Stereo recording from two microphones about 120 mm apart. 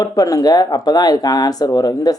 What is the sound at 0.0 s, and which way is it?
Speech, 30° left (ahead or behind).